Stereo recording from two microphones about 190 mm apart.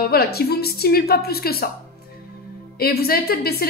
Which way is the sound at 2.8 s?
55° left (ahead or behind).